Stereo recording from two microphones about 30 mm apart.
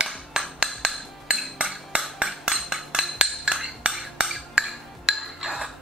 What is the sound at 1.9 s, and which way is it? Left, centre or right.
Cutlery, right.